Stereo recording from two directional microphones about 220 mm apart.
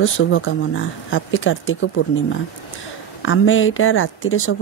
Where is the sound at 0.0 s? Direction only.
65° left (ahead or behind).